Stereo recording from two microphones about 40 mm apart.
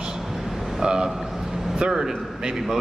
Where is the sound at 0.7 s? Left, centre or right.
Centre.